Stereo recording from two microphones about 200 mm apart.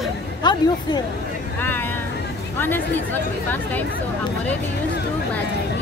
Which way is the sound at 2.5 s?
10° left (ahead or behind).